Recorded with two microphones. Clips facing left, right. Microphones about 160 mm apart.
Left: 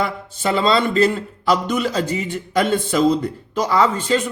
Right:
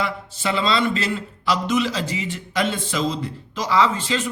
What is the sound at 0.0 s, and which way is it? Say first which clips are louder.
A man's voice: left 3 dB; 45° left (ahead or behind).